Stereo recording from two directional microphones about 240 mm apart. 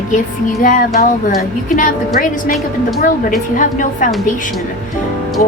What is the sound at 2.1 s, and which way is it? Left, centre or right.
A woman's voice, left.